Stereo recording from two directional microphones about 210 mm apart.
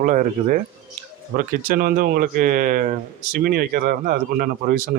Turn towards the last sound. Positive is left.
turn(degrees=-40)  # may be behind; listen again after turning